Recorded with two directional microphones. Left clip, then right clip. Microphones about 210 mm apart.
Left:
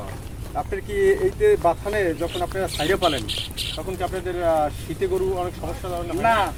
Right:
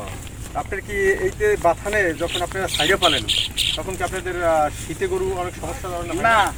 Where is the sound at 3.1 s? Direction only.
50° right (ahead or behind).